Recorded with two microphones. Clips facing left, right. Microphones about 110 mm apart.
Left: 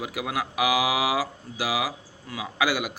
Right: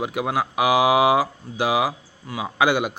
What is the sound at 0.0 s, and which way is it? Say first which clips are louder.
Mantra: right 6 dB; 25° right (ahead or behind).